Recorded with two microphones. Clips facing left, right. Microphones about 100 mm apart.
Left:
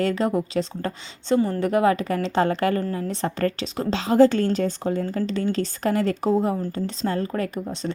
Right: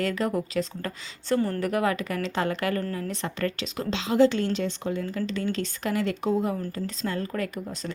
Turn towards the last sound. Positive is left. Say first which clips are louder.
# left 4 dB
turn(degrees=30)  # may be behind; listen again after turning